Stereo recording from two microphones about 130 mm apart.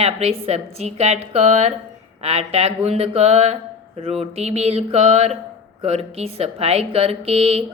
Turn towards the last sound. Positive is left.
turn(degrees=-50)  # may be behind; listen again after turning